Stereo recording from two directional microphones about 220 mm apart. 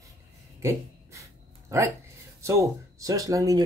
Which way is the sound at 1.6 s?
10° right (ahead or behind).